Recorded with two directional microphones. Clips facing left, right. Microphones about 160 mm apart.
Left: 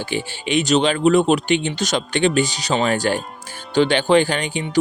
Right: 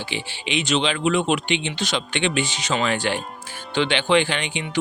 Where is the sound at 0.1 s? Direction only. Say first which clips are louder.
Left 7 dB; 45° left (ahead or behind).